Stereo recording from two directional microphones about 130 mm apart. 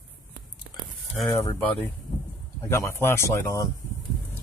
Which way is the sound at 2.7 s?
20° left (ahead or behind).